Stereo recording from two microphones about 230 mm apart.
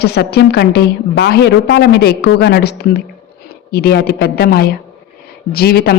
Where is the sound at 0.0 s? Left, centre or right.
Left.